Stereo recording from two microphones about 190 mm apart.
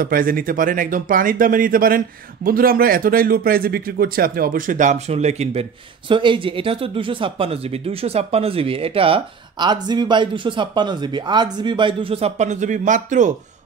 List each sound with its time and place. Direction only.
0.0 s speech: 50° right (ahead or behind)